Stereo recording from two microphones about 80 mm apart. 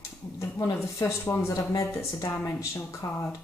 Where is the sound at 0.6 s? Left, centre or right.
Left.